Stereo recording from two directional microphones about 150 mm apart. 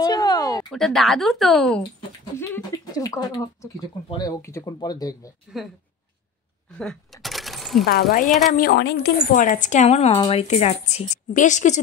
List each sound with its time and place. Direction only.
0.0 s a sound: 25° left (ahead or behind)
0.7 s speech: centre (ahead or behind)
2.3 s speech: 15° left (ahead or behind)
6.8 s cash register: centre (ahead or behind)
8.3 s speech: centre (ahead or behind)
8.5 s a woman's voice: 90° left; by 11.8 s 55° left (ahead or behind)